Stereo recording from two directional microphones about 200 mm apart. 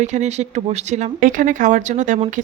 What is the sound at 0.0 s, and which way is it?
Speech, 35° right (ahead or behind).